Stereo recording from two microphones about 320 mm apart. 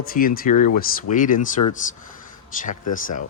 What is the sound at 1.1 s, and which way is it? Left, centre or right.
Speech, left.